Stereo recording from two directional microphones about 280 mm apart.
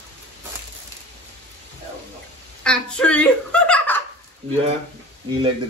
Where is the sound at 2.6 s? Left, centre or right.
Centre.